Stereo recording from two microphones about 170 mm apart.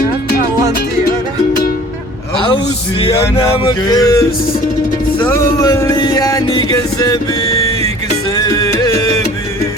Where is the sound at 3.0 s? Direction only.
35° left (ahead or behind).